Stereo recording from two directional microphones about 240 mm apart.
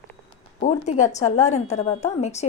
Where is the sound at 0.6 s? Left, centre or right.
Left.